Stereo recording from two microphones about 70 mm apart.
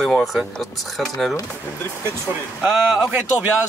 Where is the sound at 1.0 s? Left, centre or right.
Centre.